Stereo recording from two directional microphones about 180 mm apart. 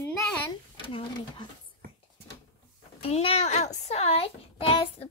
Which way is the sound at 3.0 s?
30° left (ahead or behind).